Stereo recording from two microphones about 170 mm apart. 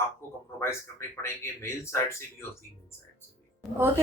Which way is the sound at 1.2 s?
15° left (ahead or behind).